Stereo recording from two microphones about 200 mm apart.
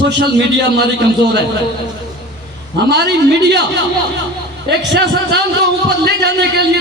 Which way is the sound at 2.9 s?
55° right (ahead or behind).